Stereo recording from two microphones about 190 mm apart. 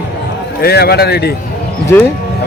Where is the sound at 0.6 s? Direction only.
55° left (ahead or behind).